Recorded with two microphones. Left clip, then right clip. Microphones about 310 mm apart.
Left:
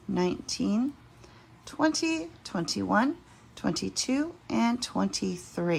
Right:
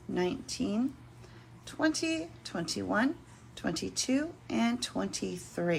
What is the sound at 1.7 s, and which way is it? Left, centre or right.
Speech, centre.